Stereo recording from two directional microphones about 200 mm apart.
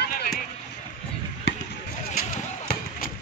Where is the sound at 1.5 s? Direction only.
65° left (ahead or behind).